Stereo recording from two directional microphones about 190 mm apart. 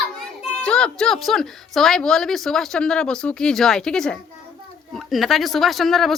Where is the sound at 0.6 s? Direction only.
5° left (ahead or behind).